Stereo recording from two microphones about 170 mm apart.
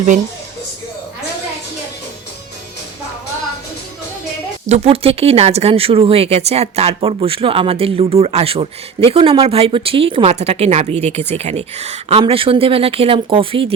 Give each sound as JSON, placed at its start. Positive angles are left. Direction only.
{"t": 4.6, "sound": "speech", "side_deg": -40}